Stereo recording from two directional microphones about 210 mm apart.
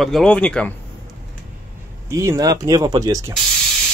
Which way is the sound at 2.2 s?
15° right (ahead or behind).